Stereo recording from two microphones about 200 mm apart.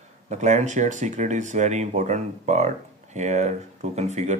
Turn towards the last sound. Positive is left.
turn(degrees=-35)  # may be behind; listen again after turning